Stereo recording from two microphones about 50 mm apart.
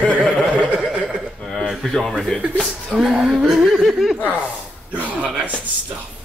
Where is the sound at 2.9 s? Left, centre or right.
Centre.